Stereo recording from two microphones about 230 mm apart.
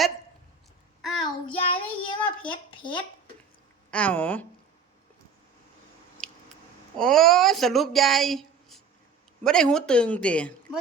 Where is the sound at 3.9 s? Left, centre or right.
Centre.